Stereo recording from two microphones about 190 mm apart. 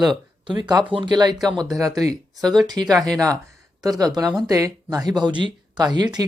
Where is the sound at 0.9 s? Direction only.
25° right (ahead or behind).